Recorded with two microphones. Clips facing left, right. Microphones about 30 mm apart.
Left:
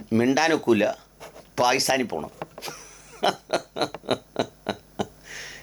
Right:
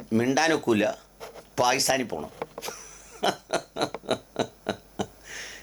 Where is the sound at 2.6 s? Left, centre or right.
Centre.